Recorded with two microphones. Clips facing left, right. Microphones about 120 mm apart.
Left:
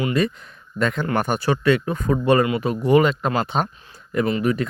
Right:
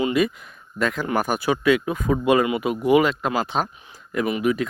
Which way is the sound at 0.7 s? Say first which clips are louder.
Left 1 dB; 5° right (ahead or behind).